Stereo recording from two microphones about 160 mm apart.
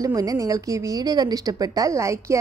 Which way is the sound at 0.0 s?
20° right (ahead or behind).